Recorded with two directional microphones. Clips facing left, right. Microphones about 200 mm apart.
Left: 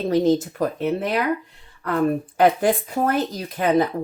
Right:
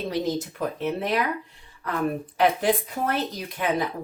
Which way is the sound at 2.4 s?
45° left (ahead or behind).